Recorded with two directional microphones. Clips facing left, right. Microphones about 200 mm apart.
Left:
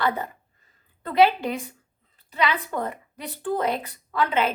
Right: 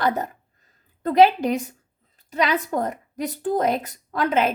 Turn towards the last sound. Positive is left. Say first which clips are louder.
# right 2 dB
turn(degrees=-45)  # may be behind; listen again after turning